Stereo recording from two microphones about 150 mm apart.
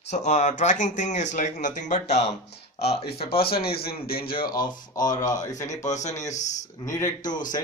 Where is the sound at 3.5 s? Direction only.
90° left.